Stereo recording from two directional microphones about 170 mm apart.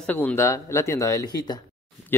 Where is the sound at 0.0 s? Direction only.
10° left (ahead or behind).